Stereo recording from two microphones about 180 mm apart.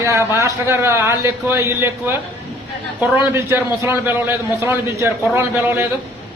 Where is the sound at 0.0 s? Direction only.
15° right (ahead or behind).